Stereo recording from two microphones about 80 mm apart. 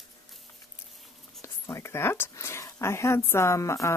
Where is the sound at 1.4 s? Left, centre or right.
Left.